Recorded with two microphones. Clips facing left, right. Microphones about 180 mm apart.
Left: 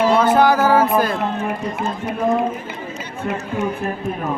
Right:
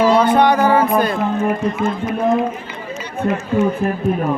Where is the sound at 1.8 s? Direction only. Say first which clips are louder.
Right 5 dB; 35° left (ahead or behind).